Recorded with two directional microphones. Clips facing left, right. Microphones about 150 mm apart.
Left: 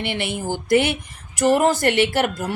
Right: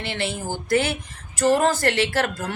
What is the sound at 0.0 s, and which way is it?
Speech, 15° left (ahead or behind).